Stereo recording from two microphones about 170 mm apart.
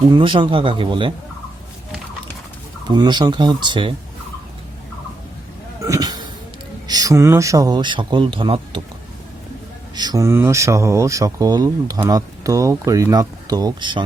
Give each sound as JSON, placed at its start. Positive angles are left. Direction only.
{"t": 0.1, "sound": "speech", "side_deg": -30}
{"t": 2.8, "sound": "speech", "side_deg": -25}
{"t": 5.8, "sound": "a sound", "side_deg": -20}
{"t": 6.8, "sound": "speech", "side_deg": -20}
{"t": 9.9, "sound": "speech", "side_deg": -25}